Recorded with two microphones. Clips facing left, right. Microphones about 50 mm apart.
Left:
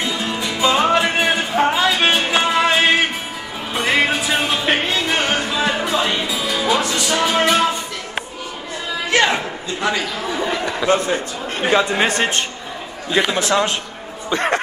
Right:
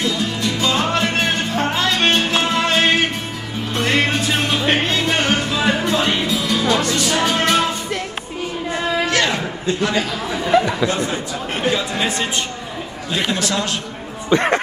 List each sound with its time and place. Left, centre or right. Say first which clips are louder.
0.0 s music: right 1 dB; centre
9.1 s a sound: left 2 dB; left
10.8 s a man's voice: left 4 dB; left
11.7 s speech: left 4 dB; left
13.4 s a man's voice: left 4 dB; left
14.3 s speech: right 3 dB; right